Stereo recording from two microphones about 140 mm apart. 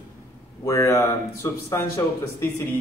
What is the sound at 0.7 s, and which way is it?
Speech, 20° left (ahead or behind).